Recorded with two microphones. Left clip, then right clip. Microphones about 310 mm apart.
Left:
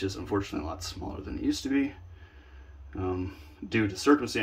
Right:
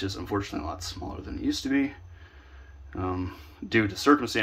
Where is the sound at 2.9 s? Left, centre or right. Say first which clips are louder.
Right 1 dB; centre.